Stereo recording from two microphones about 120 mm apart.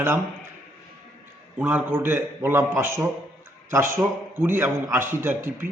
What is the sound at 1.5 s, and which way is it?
A man's voice, 15° right (ahead or behind).